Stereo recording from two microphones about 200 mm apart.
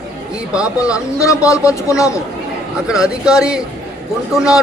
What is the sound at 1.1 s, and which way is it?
Speech, 15° left (ahead or behind).